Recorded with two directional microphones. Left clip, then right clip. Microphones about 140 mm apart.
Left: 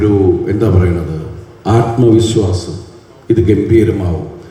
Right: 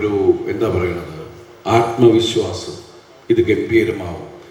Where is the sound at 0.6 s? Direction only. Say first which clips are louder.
Left 4 dB; 20° right (ahead or behind).